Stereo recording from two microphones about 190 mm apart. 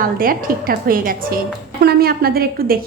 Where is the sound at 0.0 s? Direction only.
50° right (ahead or behind).